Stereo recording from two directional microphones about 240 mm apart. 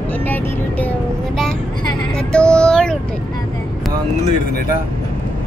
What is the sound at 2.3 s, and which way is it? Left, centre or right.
Speech, centre.